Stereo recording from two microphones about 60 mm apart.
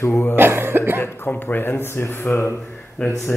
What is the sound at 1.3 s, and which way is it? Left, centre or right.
Speech, left.